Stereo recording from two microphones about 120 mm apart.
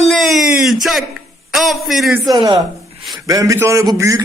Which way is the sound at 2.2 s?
30° right (ahead or behind).